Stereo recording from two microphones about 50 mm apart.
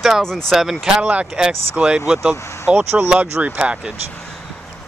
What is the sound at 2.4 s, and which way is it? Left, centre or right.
Speech, left.